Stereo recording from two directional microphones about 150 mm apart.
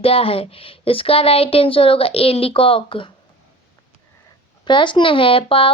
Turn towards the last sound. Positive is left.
turn(degrees=35)  # may be behind; listen again after turning